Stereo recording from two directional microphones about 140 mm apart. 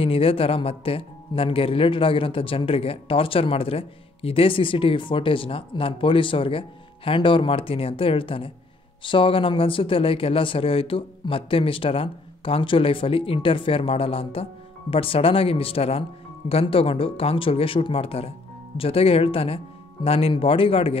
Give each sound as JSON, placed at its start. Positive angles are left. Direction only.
{"t": 0.0, "sound": "speech", "side_deg": 40}